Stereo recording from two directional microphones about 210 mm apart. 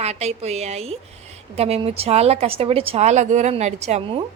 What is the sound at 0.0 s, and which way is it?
A woman's voice, 30° right (ahead or behind).